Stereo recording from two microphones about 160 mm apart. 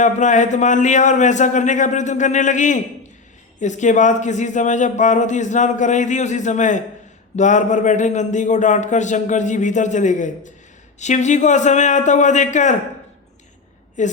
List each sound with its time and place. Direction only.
0.0 s a man's voice: 50° left (ahead or behind)
14.0 s a man's voice: 50° left (ahead or behind)